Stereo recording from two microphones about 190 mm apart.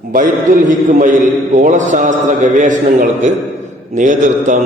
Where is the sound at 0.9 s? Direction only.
45° right (ahead or behind).